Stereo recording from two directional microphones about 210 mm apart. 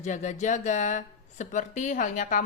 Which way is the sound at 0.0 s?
35° left (ahead or behind).